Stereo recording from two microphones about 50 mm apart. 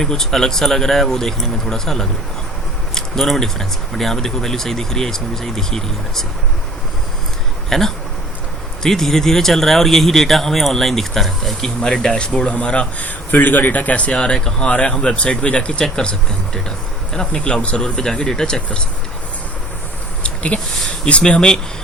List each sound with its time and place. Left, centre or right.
0.0 s speech: centre
7.7 s a man's voice: centre
17.2 s speech: centre
20.2 s a sound: left
20.8 s speech: centre